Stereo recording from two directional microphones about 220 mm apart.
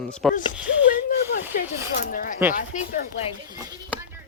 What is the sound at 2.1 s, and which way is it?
Speech, 40° left (ahead or behind).